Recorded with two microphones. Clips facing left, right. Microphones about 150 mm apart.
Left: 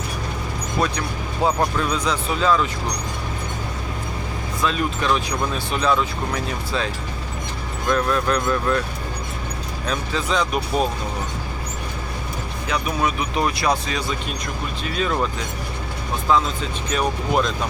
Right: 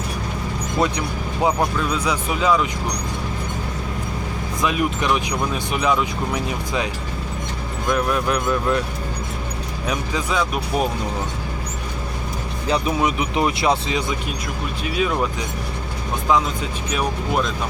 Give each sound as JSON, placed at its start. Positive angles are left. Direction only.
{"t": 0.8, "sound": "speech", "side_deg": -20}
{"t": 1.8, "sound": "speech", "side_deg": -10}
{"t": 4.6, "sound": "speech", "side_deg": -15}
{"t": 9.8, "sound": "speech", "side_deg": -15}
{"t": 13.0, "sound": "speech", "side_deg": -20}
{"t": 14.8, "sound": "speech", "side_deg": -10}